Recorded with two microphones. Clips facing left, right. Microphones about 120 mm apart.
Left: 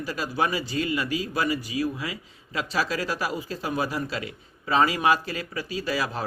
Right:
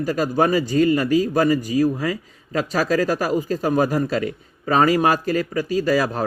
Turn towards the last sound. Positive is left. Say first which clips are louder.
# right 9 dB
turn(degrees=-45)  # may be behind; listen again after turning